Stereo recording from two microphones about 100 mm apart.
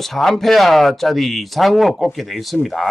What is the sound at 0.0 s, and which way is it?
Speech, centre (ahead or behind).